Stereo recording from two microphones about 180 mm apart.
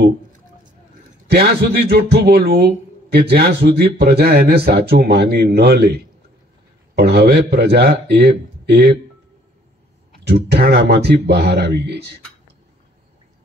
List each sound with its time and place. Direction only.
1.3 s a man's voice: 60° right (ahead or behind)
7.0 s a man's voice: 65° right (ahead or behind)
10.1 s speech: 65° right (ahead or behind)